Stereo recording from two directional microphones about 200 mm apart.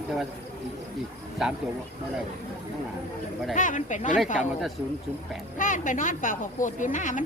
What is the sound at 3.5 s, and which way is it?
Speech, 40° left (ahead or behind).